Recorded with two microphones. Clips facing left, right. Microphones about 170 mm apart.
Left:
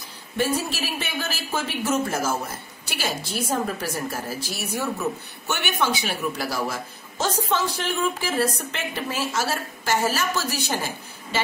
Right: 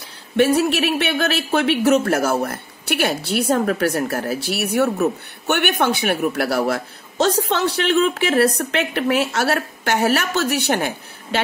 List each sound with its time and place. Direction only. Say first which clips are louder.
0.4 s speech: right 9 dB; 70° right (ahead or behind)